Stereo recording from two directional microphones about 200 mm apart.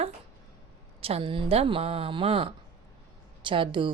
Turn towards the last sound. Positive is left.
turn(degrees=-25)  # may be behind; listen again after turning